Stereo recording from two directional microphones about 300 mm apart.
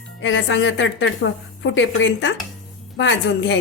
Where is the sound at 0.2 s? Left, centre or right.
Left.